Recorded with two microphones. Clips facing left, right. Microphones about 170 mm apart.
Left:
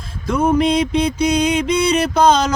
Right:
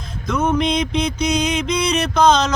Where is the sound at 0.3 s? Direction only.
30° left (ahead or behind).